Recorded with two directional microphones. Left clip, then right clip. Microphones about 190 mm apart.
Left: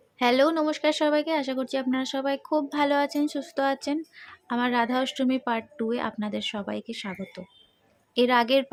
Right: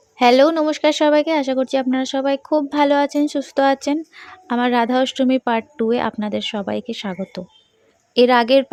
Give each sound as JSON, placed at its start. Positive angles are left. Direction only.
{"t": 0.2, "sound": "speech", "side_deg": -35}